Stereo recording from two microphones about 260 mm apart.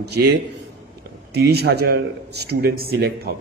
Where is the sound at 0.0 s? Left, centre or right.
Right.